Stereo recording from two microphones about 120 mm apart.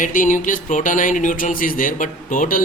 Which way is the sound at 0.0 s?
90° left.